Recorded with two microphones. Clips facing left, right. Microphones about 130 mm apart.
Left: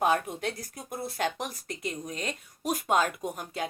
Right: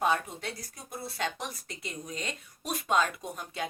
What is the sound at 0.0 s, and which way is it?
Speech, 50° left (ahead or behind).